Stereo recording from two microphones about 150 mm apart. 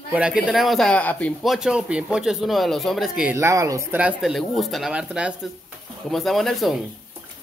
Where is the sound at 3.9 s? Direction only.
5° right (ahead or behind).